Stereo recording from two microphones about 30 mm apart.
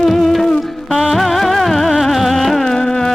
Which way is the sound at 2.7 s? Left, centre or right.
Centre.